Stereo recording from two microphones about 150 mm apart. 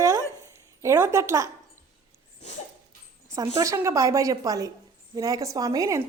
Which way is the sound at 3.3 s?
20° right (ahead or behind).